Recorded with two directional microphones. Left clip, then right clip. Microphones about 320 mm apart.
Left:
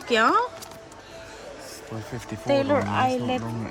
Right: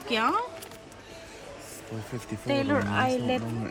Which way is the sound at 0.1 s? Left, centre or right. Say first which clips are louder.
Left 6 dB; centre.